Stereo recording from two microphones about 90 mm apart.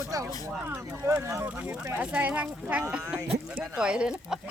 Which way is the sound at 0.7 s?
30° right (ahead or behind).